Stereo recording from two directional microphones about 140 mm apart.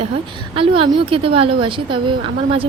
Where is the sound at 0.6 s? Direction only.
40° right (ahead or behind).